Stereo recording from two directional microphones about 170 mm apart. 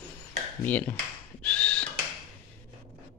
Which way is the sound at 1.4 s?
5° left (ahead or behind).